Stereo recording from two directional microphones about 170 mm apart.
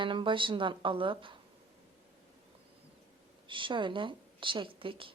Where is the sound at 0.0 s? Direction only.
30° right (ahead or behind).